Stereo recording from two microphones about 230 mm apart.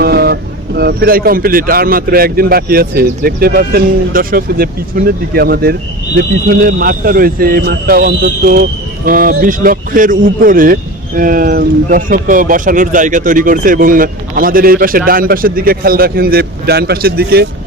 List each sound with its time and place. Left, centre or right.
0.0 s boat: right
0.8 s speech: right